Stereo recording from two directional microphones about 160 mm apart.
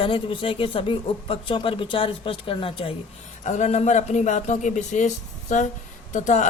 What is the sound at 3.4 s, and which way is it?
Speech, 45° left (ahead or behind).